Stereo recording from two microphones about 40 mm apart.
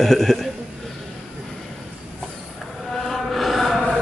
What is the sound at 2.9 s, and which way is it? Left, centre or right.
Chant, centre.